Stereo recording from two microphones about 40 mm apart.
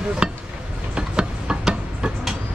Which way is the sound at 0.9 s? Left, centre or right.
Right.